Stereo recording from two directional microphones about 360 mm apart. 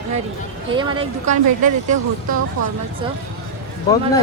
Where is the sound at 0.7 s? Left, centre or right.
Centre.